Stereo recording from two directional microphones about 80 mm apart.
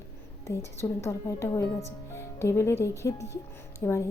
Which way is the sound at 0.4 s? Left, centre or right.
Left.